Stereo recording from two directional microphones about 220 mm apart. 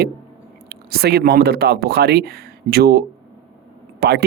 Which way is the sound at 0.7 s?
45° right (ahead or behind).